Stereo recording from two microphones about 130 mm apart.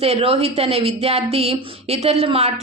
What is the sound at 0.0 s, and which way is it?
A woman's voice, 50° right (ahead or behind).